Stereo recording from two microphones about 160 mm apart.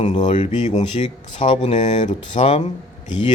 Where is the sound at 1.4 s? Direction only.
35° left (ahead or behind).